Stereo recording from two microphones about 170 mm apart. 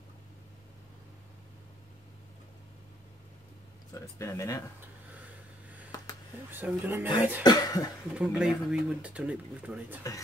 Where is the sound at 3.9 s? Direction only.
15° left (ahead or behind).